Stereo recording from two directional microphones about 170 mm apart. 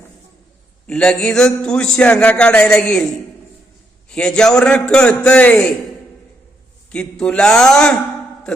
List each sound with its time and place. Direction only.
0.9 s a man's voice: 5° left (ahead or behind)
4.1 s a man's voice: 5° left (ahead or behind)
6.9 s a man's voice: 5° left (ahead or behind)